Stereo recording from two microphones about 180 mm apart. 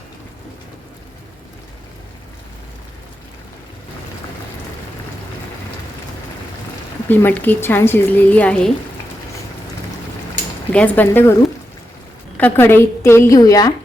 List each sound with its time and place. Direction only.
7.1 s a woman's voice: 10° left (ahead or behind)
10.7 s a woman's voice: 10° left (ahead or behind)
12.4 s a woman's voice: 10° left (ahead or behind)